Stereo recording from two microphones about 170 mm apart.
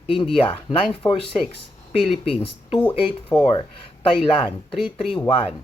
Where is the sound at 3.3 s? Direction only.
25° left (ahead or behind).